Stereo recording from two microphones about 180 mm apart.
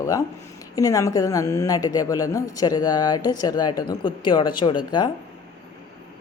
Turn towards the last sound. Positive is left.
turn(degrees=25)  # may be behind; listen again after turning